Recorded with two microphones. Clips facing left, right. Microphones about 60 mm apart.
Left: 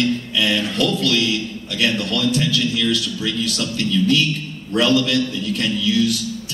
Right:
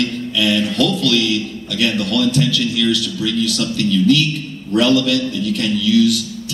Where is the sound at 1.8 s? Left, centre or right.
Right.